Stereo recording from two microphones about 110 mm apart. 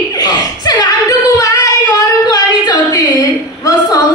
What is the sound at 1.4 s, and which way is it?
Singing, 30° left (ahead or behind).